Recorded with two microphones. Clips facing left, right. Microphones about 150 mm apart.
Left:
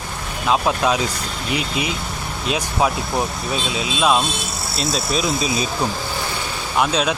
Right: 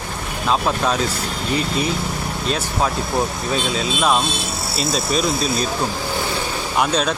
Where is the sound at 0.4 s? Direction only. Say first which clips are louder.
Left 1 dB; 5° left (ahead or behind).